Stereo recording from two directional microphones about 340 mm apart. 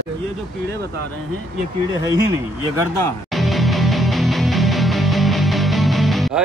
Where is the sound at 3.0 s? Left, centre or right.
Centre.